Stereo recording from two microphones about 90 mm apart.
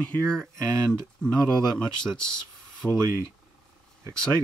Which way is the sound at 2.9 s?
30° right (ahead or behind).